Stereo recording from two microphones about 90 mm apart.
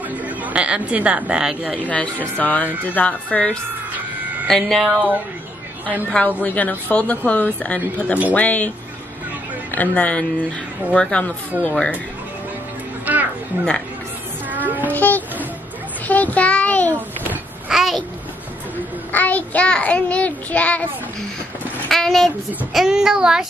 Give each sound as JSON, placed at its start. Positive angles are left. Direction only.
{"t": 0.1, "sound": "speech", "side_deg": -15}
{"t": 1.8, "sound": "speech", "side_deg": 15}
{"t": 4.5, "sound": "speech", "side_deg": 0}
{"t": 6.0, "sound": "speech", "side_deg": 15}
{"t": 13.0, "sound": "a sound", "side_deg": -20}
{"t": 14.5, "sound": "a sound", "side_deg": -20}
{"t": 14.9, "sound": "a sound", "side_deg": 20}
{"t": 16.1, "sound": "a child's voice", "side_deg": 15}
{"t": 16.9, "sound": "a sound", "side_deg": -20}
{"t": 17.6, "sound": "a child's voice", "side_deg": -5}
{"t": 19.1, "sound": "speech", "side_deg": 15}
{"t": 21.8, "sound": "speech", "side_deg": 5}